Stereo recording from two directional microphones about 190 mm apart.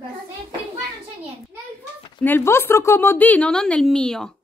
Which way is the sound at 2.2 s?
10° left (ahead or behind).